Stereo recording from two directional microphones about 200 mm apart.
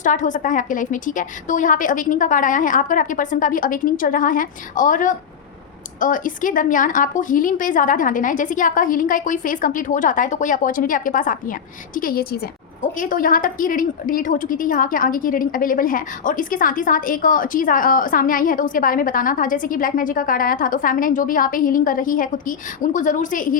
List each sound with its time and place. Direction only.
0.0 s a woman's voice: 40° left (ahead or behind)